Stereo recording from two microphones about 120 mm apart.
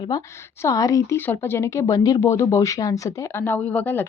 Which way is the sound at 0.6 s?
30° left (ahead or behind).